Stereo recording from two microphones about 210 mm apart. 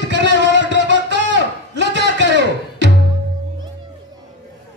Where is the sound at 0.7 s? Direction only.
60° right (ahead or behind).